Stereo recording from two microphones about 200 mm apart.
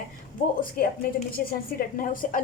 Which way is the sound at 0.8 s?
45° left (ahead or behind).